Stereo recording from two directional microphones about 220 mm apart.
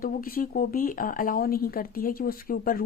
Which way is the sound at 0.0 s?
40° left (ahead or behind).